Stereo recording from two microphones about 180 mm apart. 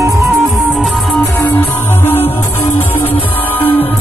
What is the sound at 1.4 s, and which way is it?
Music, 10° left (ahead or behind).